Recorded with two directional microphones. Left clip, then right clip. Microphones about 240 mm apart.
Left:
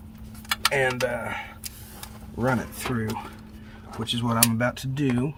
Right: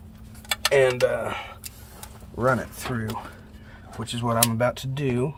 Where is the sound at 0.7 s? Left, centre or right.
Right.